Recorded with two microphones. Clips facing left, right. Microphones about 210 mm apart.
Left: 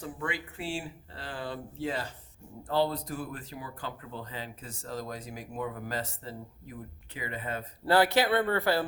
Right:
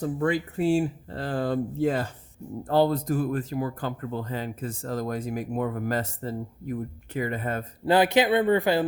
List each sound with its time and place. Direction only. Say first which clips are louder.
0.0 s speech: right 11 dB; 40° right (ahead or behind)
7.9 s speech: right 4 dB; 15° right (ahead or behind)